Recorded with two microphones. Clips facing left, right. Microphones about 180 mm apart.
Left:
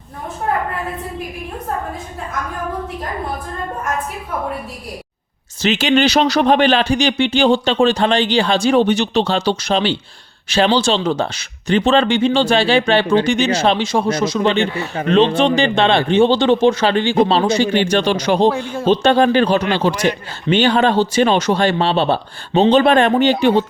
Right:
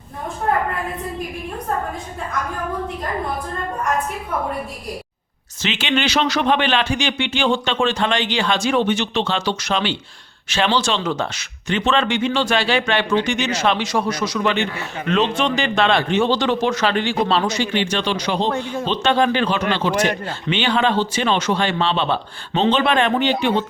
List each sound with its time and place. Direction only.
5.6 s speech: 40° left (ahead or behind)